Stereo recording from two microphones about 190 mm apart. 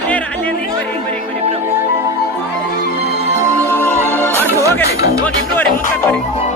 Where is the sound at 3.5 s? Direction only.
15° right (ahead or behind).